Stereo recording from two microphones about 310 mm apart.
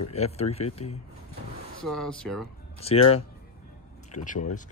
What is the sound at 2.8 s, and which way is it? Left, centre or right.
Speech, centre.